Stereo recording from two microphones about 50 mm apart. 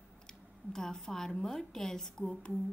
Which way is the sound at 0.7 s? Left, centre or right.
Centre.